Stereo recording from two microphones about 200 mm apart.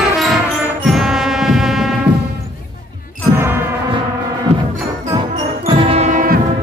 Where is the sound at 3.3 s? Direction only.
10° right (ahead or behind).